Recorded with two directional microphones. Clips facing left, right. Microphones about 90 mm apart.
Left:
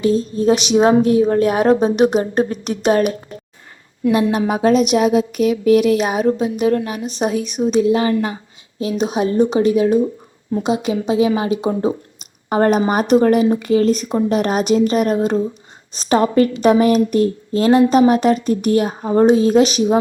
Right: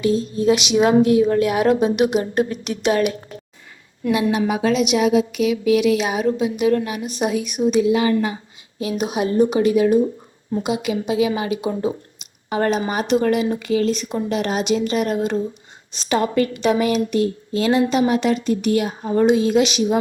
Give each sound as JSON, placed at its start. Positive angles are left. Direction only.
{"t": 0.0, "sound": "a woman's voice", "side_deg": 35}